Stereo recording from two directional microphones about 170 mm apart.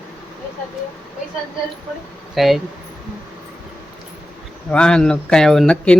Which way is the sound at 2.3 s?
Centre (ahead or behind).